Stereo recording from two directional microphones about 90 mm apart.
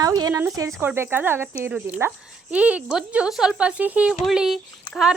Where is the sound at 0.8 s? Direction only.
25° right (ahead or behind).